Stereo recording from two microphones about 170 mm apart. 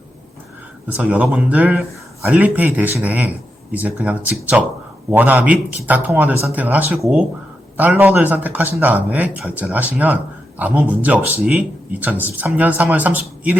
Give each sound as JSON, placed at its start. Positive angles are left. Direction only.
{"t": 0.9, "sound": "speech", "side_deg": -10}